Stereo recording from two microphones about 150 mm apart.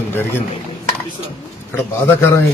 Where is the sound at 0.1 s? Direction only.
15° left (ahead or behind).